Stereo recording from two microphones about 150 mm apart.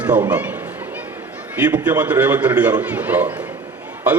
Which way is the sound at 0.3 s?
10° right (ahead or behind).